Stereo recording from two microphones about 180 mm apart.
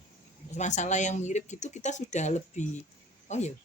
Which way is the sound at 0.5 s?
40° left (ahead or behind).